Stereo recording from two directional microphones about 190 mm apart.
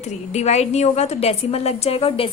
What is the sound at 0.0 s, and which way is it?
A woman's voice, 35° left (ahead or behind).